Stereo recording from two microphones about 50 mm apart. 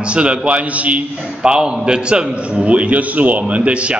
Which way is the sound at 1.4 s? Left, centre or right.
Centre.